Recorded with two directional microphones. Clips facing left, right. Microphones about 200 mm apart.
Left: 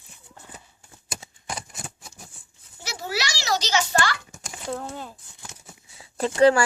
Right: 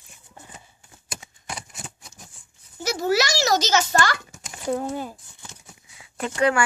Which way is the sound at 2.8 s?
45° right (ahead or behind).